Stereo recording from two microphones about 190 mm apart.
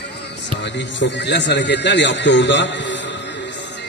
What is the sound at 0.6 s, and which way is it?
A man's voice, 70° left (ahead or behind).